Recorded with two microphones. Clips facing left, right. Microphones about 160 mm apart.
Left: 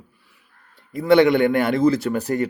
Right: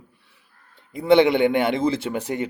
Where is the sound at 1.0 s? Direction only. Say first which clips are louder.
Left 1 dB; 25° right (ahead or behind).